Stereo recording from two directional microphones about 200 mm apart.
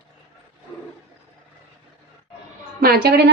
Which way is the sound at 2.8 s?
50° right (ahead or behind).